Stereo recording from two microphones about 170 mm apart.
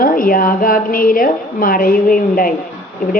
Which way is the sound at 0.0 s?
55° left (ahead or behind).